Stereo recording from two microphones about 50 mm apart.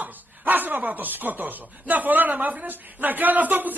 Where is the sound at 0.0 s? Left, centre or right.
Right.